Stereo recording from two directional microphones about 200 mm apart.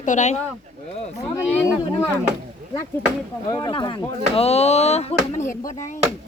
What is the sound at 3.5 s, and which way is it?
Speech, 20° left (ahead or behind).